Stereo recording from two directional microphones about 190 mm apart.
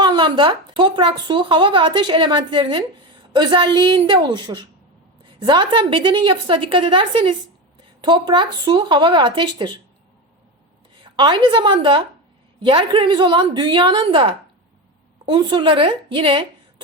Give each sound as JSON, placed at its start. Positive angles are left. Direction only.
{"t": 0.0, "sound": "speech", "side_deg": -25}
{"t": 11.0, "sound": "a woman's voice", "side_deg": -25}